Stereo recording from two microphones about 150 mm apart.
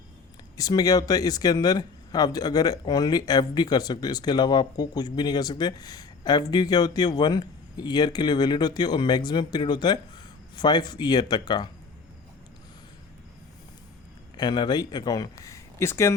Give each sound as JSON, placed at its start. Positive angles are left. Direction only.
{"t": 0.5, "sound": "speech", "side_deg": 25}
{"t": 14.3, "sound": "speech", "side_deg": 30}